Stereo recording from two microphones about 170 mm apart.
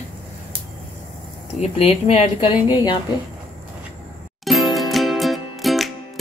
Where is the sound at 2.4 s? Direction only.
25° left (ahead or behind).